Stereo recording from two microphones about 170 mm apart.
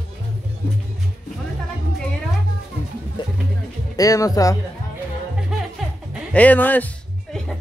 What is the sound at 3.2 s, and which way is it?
Music, 25° left (ahead or behind).